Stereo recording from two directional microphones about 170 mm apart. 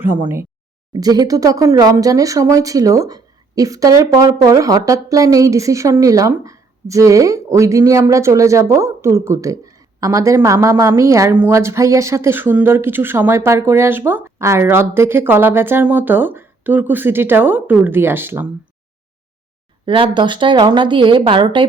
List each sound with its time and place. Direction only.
0.9 s speech: 20° right (ahead or behind)
19.8 s a woman's voice: 30° right (ahead or behind)